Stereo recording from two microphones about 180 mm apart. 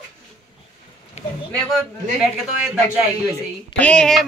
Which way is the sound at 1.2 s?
35° left (ahead or behind).